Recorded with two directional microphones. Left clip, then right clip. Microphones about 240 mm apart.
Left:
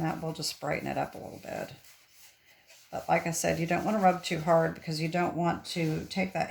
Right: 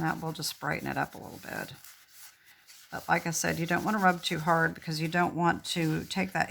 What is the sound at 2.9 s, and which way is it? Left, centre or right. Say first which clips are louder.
Speech: left 1 dB; centre.